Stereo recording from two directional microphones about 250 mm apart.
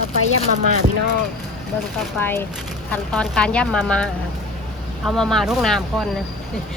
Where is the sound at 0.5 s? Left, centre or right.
Right.